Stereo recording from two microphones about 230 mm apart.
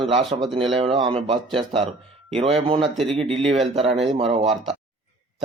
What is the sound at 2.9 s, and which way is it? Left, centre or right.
Speech, centre.